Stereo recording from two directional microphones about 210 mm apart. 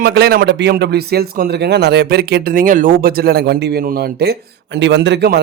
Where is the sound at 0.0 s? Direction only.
50° right (ahead or behind).